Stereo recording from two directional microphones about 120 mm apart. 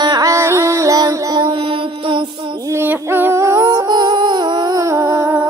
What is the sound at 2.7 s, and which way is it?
Music, 20° right (ahead or behind).